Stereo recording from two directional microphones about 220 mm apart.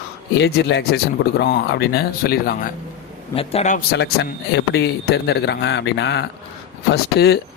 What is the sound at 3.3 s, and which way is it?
Speech, 25° left (ahead or behind).